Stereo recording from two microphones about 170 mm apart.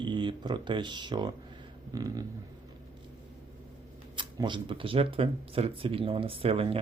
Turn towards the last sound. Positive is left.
turn(degrees=-35)  # may be behind; listen again after turning